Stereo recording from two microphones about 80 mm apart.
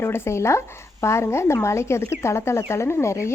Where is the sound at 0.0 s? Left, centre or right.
Left.